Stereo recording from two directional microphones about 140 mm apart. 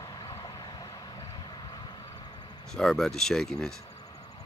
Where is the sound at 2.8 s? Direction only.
5° left (ahead or behind).